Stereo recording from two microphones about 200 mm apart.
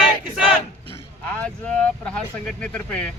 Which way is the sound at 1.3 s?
5° left (ahead or behind).